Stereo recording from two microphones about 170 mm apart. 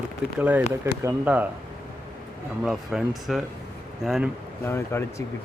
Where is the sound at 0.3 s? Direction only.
10° right (ahead or behind).